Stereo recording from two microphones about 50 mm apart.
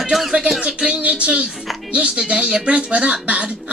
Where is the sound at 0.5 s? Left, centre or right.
Right.